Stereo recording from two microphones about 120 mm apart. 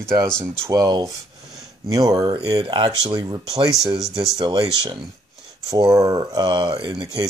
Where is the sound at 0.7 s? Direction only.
35° right (ahead or behind).